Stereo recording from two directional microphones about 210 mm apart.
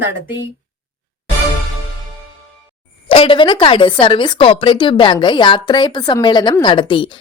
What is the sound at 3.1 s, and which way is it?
A woman's voice, 25° left (ahead or behind).